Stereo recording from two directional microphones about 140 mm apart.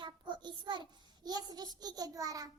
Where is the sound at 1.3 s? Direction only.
30° right (ahead or behind).